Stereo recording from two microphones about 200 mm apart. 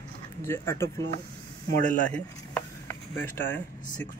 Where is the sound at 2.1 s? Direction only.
5° left (ahead or behind).